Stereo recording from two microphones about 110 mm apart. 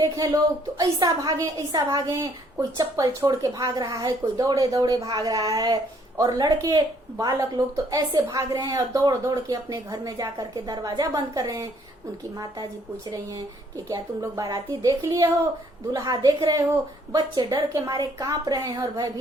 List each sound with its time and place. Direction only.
0.0 s speech: 30° right (ahead or behind)
13.8 s a woman's voice: 30° right (ahead or behind)